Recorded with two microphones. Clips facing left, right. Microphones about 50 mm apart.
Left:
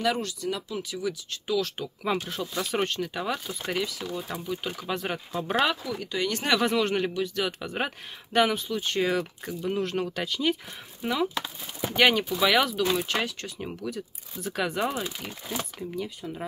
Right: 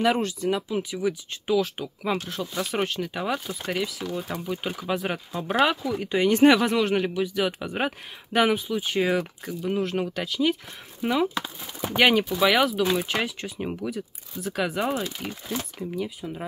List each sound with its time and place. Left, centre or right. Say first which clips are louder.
0.0 s speech: right 4 dB; right
2.1 s speech: right 1 dB; centre
6.1 s speech: right 9 dB; right
6.6 s speech: right 2 dB; centre
11.0 s speech: right 3 dB; centre
13.9 s speech: right 3 dB; centre